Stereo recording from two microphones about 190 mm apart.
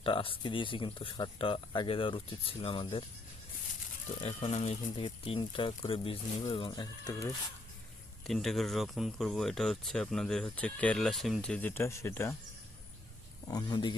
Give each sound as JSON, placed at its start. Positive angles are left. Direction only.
{"t": 0.0, "sound": "speech", "side_deg": 30}
{"t": 4.2, "sound": "speech", "side_deg": 30}
{"t": 8.3, "sound": "speech", "side_deg": 0}
{"t": 13.5, "sound": "speech", "side_deg": 20}